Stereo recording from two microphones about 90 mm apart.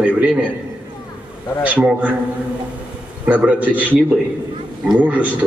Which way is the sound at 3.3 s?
15° right (ahead or behind).